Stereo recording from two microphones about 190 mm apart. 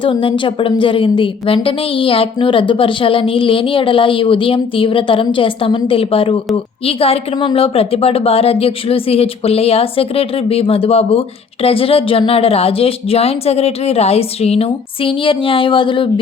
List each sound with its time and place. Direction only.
0.0 s a woman's voice: 25° left (ahead or behind)